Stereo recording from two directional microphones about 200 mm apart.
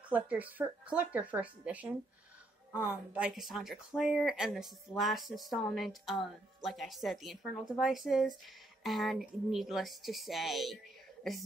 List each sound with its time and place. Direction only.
0.1 s speech: 10° right (ahead or behind)